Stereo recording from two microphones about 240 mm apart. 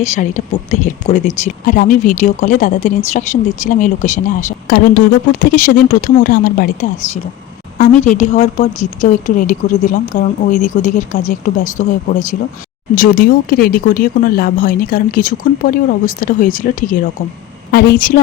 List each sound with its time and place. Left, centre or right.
0.0 s speech: left